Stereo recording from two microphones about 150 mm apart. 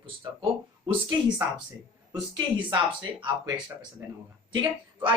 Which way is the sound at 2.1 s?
25° right (ahead or behind).